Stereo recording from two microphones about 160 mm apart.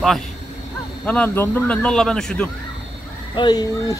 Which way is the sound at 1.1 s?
10° left (ahead or behind).